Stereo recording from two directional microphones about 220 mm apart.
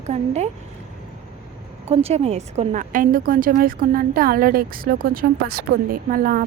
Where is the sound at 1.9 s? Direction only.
30° right (ahead or behind).